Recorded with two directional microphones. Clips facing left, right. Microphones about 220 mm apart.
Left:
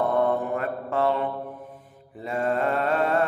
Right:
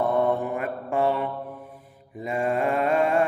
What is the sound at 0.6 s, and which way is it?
Mantra, 15° right (ahead or behind).